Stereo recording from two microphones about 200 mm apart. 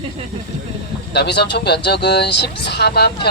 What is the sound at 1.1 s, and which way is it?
Speech, 55° left (ahead or behind).